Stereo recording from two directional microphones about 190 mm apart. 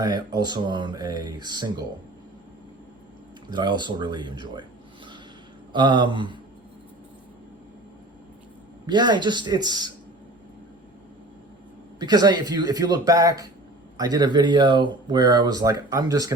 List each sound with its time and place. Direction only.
0.0 s speech: 20° right (ahead or behind)
3.5 s speech: 25° right (ahead or behind)
5.7 s speech: 25° right (ahead or behind)
8.9 s speech: 25° right (ahead or behind)
11.9 s speech: 20° right (ahead or behind)